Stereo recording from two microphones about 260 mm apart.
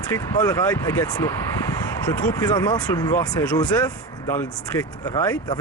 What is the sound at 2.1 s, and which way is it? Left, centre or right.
Speech, centre.